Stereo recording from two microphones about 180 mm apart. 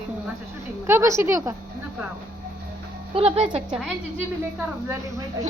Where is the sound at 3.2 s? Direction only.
35° right (ahead or behind).